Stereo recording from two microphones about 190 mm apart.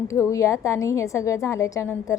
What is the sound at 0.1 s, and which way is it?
A woman's voice, 15° left (ahead or behind).